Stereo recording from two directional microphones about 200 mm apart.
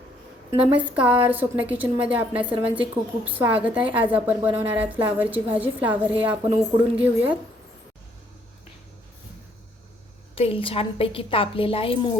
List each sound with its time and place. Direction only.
0.5 s a woman's voice: 5° right (ahead or behind)
10.3 s a woman's voice: 25° left (ahead or behind)